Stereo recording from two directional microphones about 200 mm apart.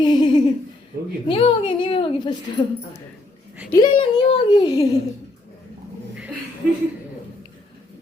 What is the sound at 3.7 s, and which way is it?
A woman's voice, 20° left (ahead or behind).